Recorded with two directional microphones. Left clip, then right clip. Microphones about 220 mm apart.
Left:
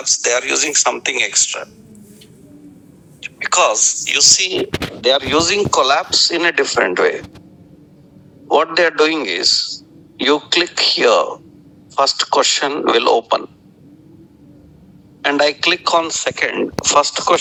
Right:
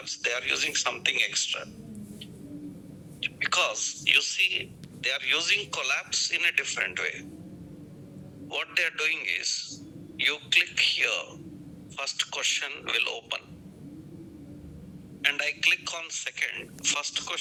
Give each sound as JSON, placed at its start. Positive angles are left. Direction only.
{"t": 0.0, "sound": "speech", "side_deg": 0}
{"t": 3.2, "sound": "speech", "side_deg": 0}
{"t": 4.9, "sound": "a man's voice", "side_deg": -25}
{"t": 8.4, "sound": "a man's voice", "side_deg": -20}
{"t": 15.2, "sound": "a man's voice", "side_deg": -25}